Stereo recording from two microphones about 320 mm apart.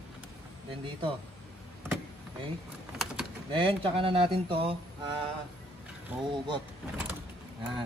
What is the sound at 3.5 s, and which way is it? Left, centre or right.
Speech, centre.